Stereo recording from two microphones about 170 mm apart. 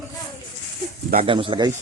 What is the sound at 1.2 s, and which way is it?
Speech, 30° right (ahead or behind).